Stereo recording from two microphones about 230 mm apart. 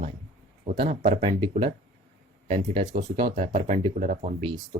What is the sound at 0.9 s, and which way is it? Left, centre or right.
Speech, right.